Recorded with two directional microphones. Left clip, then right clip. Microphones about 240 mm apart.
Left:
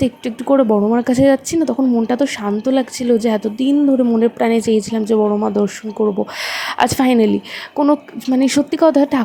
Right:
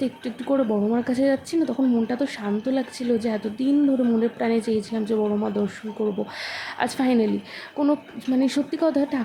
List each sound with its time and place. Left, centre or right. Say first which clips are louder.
0.0 s speech: left 9 dB; left